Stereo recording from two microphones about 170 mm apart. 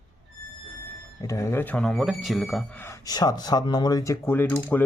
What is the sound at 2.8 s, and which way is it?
Speech, 20° left (ahead or behind).